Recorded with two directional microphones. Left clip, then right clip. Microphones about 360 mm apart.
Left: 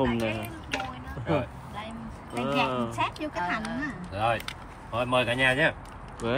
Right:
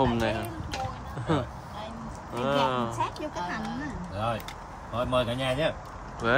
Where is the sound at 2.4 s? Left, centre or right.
Centre.